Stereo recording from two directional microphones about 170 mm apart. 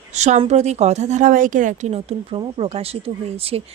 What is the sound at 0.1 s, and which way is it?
A woman's voice, 40° right (ahead or behind).